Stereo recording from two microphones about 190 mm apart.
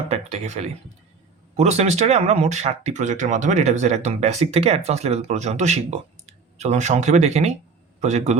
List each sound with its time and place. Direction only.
0.1 s speech: 35° right (ahead or behind)